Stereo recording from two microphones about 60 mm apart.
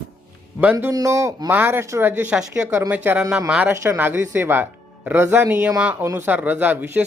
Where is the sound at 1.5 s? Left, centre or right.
Right.